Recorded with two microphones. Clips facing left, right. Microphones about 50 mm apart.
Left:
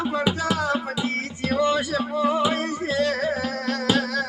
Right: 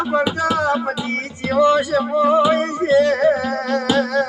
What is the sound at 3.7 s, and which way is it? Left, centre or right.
Music, centre.